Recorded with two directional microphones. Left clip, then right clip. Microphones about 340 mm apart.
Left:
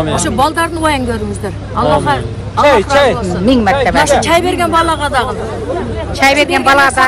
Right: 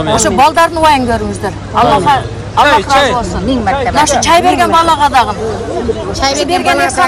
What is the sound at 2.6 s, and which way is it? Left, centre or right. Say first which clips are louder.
Speech: even; left.